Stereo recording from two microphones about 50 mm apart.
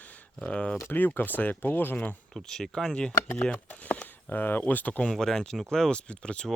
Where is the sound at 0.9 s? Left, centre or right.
Left.